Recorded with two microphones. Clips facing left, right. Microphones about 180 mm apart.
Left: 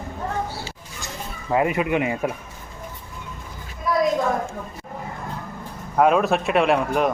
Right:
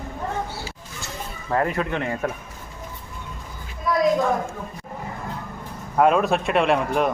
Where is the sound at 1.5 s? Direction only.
10° left (ahead or behind).